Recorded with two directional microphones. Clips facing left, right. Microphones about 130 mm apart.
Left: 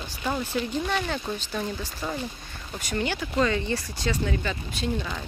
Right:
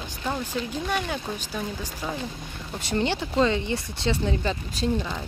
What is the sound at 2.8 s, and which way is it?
Speech, 30° right (ahead or behind).